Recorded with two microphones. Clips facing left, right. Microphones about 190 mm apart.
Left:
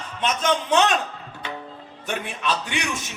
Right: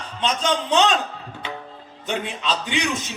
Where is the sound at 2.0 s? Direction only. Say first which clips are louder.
Right 1 dB; 20° right (ahead or behind).